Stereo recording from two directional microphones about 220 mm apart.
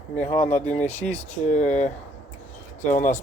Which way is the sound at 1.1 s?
30° left (ahead or behind).